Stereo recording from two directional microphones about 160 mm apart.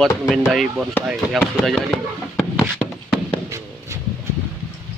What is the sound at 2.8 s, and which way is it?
Tap, centre (ahead or behind).